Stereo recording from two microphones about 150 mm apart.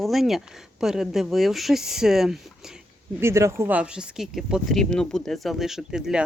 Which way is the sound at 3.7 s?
5° right (ahead or behind).